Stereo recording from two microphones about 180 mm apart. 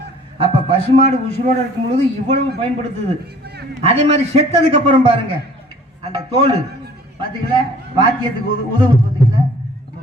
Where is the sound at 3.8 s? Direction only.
35° right (ahead or behind).